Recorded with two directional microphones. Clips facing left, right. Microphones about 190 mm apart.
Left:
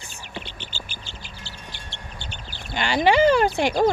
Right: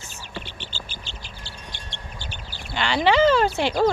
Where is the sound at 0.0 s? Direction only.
15° left (ahead or behind).